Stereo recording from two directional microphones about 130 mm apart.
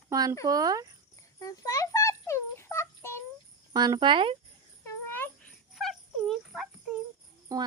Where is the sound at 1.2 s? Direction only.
25° left (ahead or behind).